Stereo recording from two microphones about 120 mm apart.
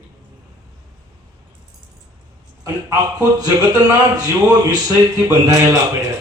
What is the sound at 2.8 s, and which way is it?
Speech, 30° right (ahead or behind).